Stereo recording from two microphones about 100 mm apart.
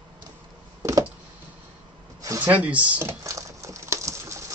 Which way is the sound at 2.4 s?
15° right (ahead or behind).